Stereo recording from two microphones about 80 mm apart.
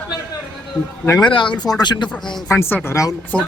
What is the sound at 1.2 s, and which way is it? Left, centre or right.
Speech, left.